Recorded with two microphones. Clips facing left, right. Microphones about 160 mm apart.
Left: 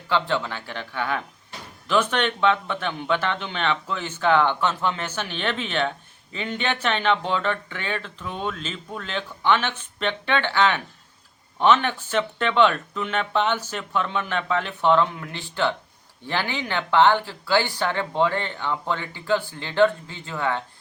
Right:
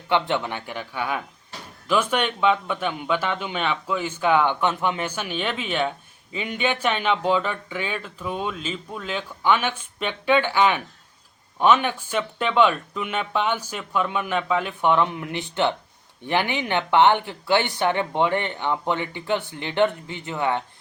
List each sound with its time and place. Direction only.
0.1 s speech: 20° right (ahead or behind)